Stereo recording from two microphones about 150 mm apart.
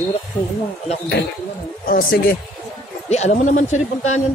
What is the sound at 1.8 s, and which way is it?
Speech, 75° left (ahead or behind).